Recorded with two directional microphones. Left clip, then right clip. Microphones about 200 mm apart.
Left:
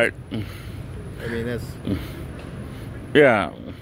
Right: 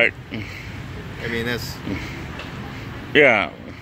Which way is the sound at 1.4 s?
5° left (ahead or behind).